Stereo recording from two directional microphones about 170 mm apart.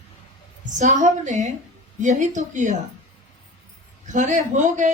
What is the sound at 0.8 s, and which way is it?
A woman's voice, 45° right (ahead or behind).